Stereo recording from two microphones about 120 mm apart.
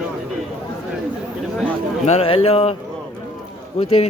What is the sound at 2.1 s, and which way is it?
Speech, 55° left (ahead or behind).